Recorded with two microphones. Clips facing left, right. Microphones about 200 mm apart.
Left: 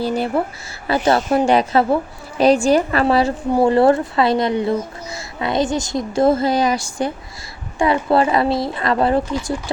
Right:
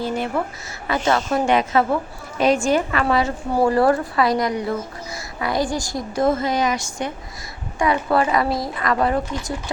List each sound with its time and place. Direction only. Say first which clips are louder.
0.0 s a woman's voice: left 4 dB; 35° left (ahead or behind)